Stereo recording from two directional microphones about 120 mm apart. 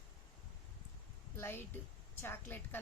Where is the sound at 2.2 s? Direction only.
20° left (ahead or behind).